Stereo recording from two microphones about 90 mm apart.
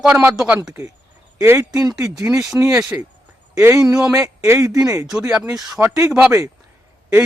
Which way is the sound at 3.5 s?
35° right (ahead or behind).